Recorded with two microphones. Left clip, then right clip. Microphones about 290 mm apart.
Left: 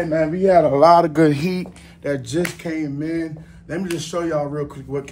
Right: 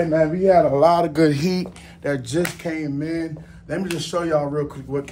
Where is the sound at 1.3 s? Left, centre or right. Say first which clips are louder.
Right 1 dB; centre.